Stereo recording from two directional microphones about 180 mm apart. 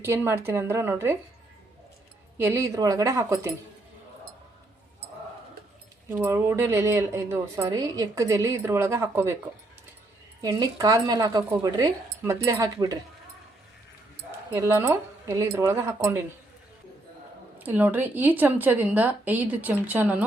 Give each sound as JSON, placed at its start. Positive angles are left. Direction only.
{"t": 0.0, "sound": "speech", "side_deg": -15}
{"t": 2.4, "sound": "speech", "side_deg": -15}
{"t": 6.1, "sound": "speech", "side_deg": -10}
{"t": 10.4, "sound": "speech", "side_deg": -20}
{"t": 14.5, "sound": "speech", "side_deg": -15}
{"t": 17.6, "sound": "speech", "side_deg": -10}